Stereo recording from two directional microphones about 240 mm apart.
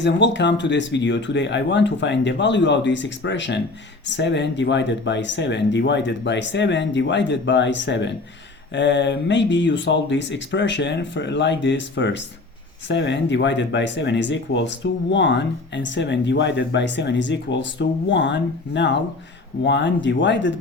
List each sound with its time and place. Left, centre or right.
0.0 s speech: left